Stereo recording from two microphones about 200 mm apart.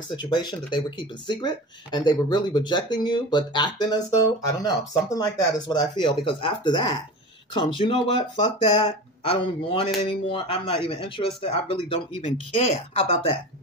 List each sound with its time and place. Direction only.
0.1 s speech: 20° left (ahead or behind)